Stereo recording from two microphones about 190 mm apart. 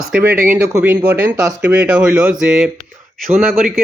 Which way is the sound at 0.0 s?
5° right (ahead or behind).